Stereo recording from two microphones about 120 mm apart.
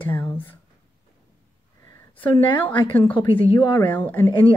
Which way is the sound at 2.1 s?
45° left (ahead or behind).